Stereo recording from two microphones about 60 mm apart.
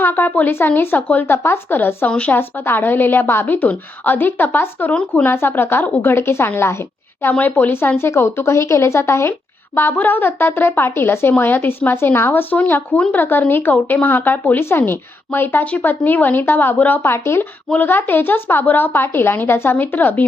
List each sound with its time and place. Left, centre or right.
0.0 s a woman's voice: left
2.0 s a woman's voice: centre
2.3 s a woman's voice: left
9.7 s a woman's voice: left
17.0 s a woman's voice: left